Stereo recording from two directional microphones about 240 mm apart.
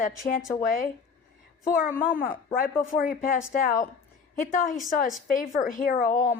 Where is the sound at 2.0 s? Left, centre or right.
Left.